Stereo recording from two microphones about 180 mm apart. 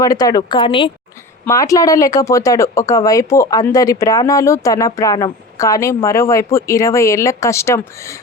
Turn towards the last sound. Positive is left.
turn(degrees=15)  # may be behind; listen again after turning